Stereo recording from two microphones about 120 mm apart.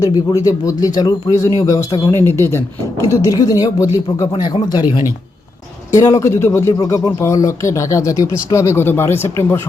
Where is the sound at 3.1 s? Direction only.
30° left (ahead or behind).